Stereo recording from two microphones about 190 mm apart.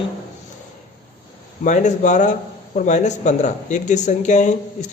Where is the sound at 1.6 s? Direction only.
40° left (ahead or behind).